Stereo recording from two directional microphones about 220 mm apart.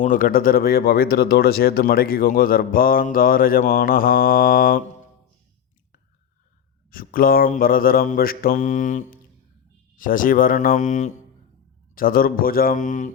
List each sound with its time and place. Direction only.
0.0 s speech: 40° left (ahead or behind)
6.9 s speech: 40° left (ahead or behind)